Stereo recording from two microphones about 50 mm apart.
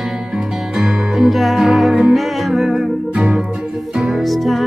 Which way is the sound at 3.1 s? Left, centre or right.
Right.